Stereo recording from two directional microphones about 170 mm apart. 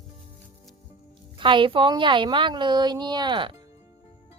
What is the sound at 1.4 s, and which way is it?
A woman's voice, 30° right (ahead or behind).